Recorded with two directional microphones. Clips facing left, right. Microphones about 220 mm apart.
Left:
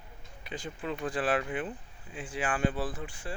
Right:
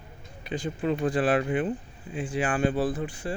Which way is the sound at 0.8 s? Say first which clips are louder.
Right 7 dB; 35° right (ahead or behind).